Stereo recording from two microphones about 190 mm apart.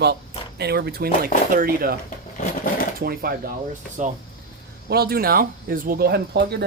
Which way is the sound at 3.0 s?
50° right (ahead or behind).